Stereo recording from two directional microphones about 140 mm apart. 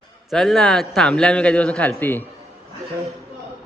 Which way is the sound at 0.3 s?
5° left (ahead or behind).